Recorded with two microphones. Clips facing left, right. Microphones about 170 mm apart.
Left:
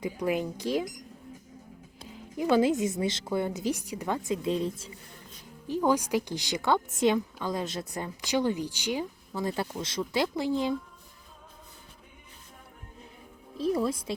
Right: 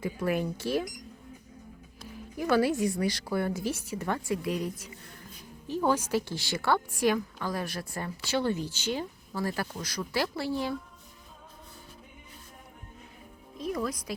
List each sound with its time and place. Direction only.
0.0 s a woman's voice: 15° left (ahead or behind)
2.0 s a woman's voice: 20° left (ahead or behind)
5.6 s a woman's voice: 15° left (ahead or behind)
13.6 s a woman's voice: 30° left (ahead or behind)